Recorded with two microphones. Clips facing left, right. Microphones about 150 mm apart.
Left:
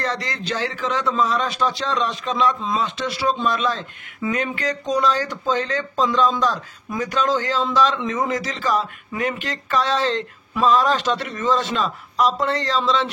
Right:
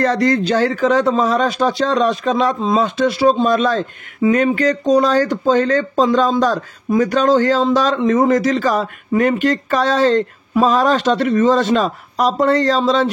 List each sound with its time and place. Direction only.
0.0 s a man's voice: 50° right (ahead or behind)